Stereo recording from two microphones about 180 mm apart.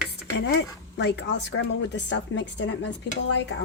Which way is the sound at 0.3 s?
70° left (ahead or behind).